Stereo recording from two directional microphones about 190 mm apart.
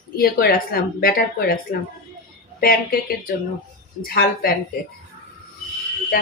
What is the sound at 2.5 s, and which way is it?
Speech, 55° left (ahead or behind).